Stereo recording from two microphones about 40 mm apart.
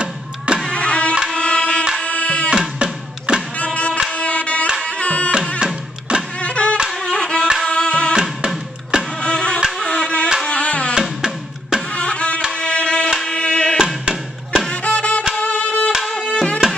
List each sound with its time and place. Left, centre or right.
0.7 s music: left
2.8 s music: right
3.5 s music: left
5.6 s music: right
6.4 s music: left
7.0 s music: centre
8.1 s music: right
9.2 s music: left
11.0 s music: centre
11.9 s music: left
15.4 s violin: left
16.1 s music: left